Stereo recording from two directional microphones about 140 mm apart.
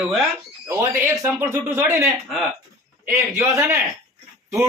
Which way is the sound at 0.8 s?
20° right (ahead or behind).